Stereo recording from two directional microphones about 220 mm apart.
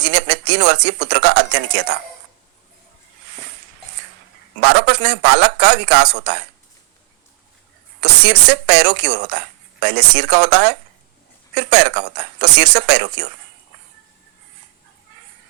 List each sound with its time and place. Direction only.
0.0 s speech: 50° right (ahead or behind)
4.6 s speech: 50° right (ahead or behind)
8.0 s speech: 50° right (ahead or behind)